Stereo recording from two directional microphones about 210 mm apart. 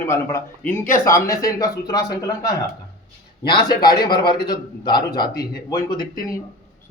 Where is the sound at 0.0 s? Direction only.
15° left (ahead or behind).